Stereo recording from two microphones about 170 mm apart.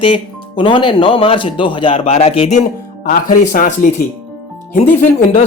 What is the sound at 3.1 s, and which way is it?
Speech, 55° left (ahead or behind).